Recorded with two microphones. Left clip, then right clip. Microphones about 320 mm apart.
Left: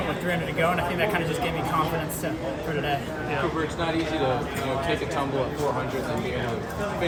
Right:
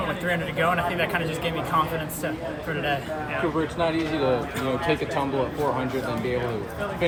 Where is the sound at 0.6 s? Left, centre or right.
Centre.